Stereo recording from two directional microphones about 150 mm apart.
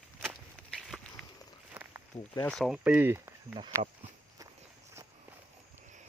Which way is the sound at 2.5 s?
Centre (ahead or behind).